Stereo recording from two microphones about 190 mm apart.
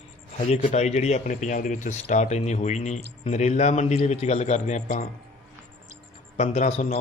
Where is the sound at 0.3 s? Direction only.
40° left (ahead or behind).